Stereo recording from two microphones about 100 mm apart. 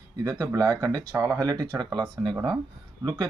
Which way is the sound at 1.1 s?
25° right (ahead or behind).